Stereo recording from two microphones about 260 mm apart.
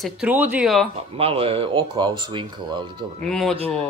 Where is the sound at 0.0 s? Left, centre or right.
Centre.